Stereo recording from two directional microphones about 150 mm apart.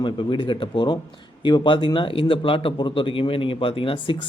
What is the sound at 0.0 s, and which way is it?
Speech, 35° left (ahead or behind).